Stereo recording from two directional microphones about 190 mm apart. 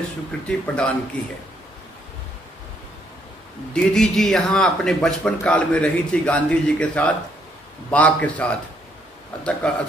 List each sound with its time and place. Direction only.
0.5 s speech: 5° left (ahead or behind)
3.7 s a man's voice: 5° left (ahead or behind)
9.6 s speech: 5° left (ahead or behind)